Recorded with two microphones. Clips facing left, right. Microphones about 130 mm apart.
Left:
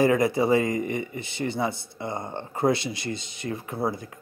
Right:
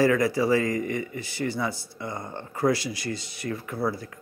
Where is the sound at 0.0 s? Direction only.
20° left (ahead or behind).